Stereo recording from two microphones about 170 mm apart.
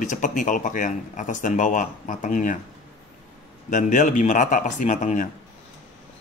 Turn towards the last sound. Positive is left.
turn(degrees=50)  # may be behind; listen again after turning